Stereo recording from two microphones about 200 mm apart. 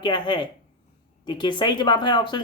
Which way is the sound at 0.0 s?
25° left (ahead or behind).